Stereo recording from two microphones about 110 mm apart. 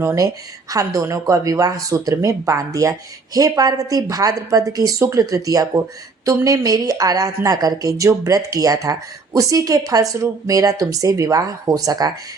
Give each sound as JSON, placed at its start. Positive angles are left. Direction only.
{"t": 0.0, "sound": "a woman's voice", "side_deg": -25}